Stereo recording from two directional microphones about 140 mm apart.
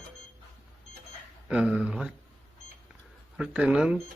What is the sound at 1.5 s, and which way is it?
Speech, 5° right (ahead or behind).